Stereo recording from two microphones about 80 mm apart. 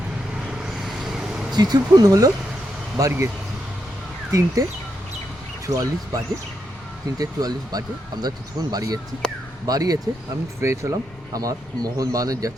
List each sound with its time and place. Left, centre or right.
0.4 s vehicle: centre
1.5 s speech: right
4.3 s speech: right
5.6 s speech: right
10.6 s speech: right
11.3 s speech: right